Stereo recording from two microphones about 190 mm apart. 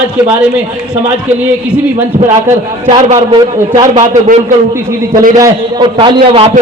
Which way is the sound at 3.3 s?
20° right (ahead or behind).